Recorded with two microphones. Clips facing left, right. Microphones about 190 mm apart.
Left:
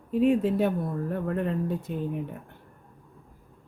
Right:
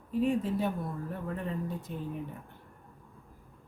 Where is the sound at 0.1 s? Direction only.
70° left (ahead or behind).